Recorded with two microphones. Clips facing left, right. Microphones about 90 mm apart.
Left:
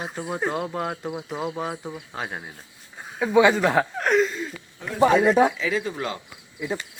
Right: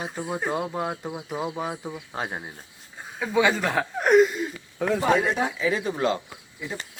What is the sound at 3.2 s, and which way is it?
Speech, 15° left (ahead or behind).